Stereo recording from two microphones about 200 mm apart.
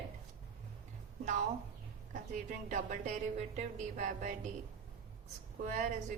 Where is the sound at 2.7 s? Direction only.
40° right (ahead or behind).